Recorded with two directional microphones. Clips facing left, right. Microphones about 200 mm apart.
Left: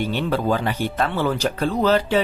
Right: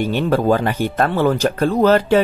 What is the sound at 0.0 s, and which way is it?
Speech, 50° right (ahead or behind).